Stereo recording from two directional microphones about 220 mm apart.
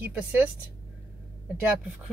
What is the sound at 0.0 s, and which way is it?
Speech, 5° right (ahead or behind).